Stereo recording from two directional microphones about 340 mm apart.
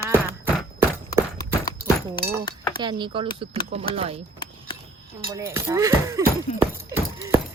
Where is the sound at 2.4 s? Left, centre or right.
Centre.